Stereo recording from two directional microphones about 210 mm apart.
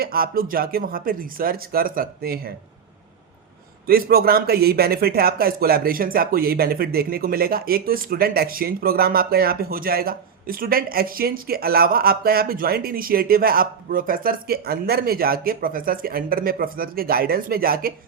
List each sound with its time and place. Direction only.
0.0 s a man's voice: 45° right (ahead or behind)
3.8 s a man's voice: 45° right (ahead or behind)